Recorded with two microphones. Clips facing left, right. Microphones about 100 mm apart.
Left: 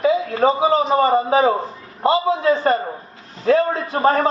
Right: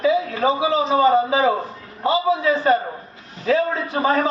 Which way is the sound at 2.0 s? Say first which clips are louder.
Left 2 dB; 50° left (ahead or behind).